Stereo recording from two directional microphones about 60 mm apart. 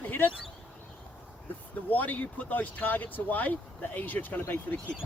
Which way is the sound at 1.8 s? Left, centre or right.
Left.